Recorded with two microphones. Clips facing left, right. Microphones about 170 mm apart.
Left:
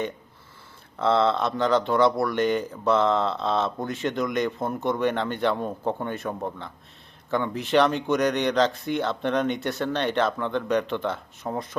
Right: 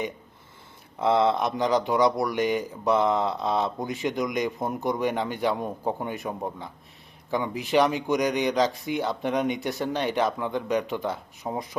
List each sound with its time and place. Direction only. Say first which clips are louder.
0.9 s speech: even; 15° right (ahead or behind)